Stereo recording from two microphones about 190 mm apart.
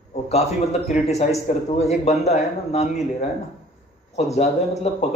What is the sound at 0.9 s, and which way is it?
A man's voice, 40° left (ahead or behind).